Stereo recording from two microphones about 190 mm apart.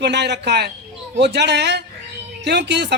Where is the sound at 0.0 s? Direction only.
65° right (ahead or behind).